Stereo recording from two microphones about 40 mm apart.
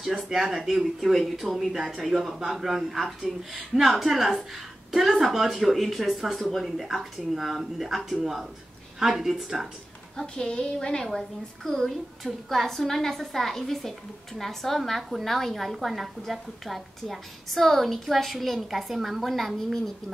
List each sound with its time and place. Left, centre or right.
0.3 s a woman's voice: centre
10.1 s a woman's voice: left
11.1 s a woman's voice: centre